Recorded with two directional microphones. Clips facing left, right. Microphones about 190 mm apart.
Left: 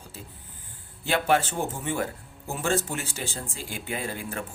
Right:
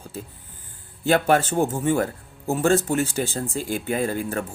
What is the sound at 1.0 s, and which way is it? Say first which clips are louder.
Speech: right 5 dB; 45° right (ahead or behind).